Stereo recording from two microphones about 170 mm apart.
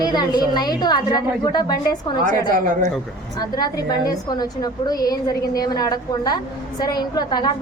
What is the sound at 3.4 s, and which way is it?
A woman's voice, 25° left (ahead or behind).